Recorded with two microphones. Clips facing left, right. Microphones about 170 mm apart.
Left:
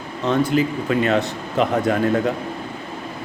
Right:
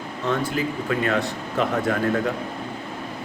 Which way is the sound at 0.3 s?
20° left (ahead or behind).